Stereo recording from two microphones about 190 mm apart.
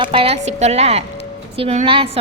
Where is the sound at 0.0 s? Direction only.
30° right (ahead or behind).